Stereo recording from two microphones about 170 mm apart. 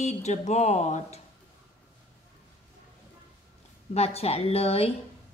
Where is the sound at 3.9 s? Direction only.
35° left (ahead or behind).